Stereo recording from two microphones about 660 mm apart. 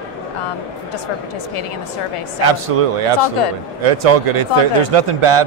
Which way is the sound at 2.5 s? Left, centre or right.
Right.